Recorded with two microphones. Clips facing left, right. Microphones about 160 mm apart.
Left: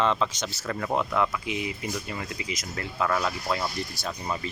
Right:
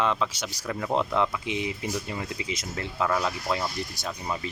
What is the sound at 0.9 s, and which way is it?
Speech, 20° right (ahead or behind).